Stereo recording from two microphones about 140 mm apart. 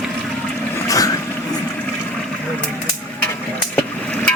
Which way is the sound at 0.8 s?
25° left (ahead or behind).